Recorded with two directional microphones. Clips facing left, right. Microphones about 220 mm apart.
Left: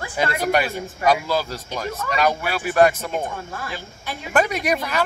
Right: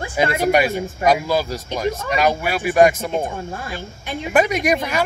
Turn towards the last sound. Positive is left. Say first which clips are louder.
# right 3 dB
turn(degrees=-15)  # may be behind; listen again after turning